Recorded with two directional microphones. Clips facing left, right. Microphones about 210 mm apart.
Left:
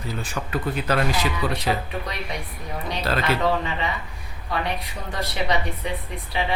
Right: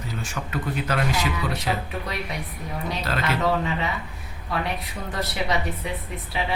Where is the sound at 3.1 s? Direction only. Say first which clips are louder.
Left 4 dB; 35° left (ahead or behind).